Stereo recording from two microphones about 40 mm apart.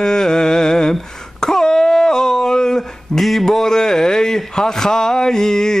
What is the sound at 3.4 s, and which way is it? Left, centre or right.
Speech, centre.